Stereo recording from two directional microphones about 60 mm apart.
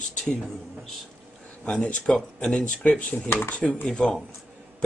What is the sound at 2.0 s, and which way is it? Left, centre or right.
Speech, centre.